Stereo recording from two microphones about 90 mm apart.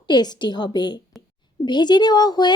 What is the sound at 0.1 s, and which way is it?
A woman's voice, 50° left (ahead or behind).